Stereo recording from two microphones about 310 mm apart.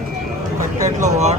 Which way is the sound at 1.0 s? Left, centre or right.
Right.